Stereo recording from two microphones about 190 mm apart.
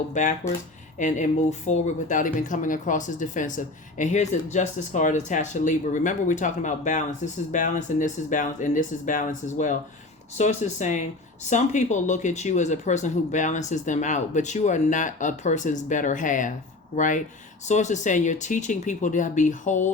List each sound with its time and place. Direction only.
0.1 s speech: 40° left (ahead or behind)